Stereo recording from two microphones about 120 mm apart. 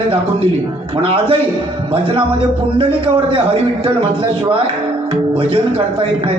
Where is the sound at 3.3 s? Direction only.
50° right (ahead or behind).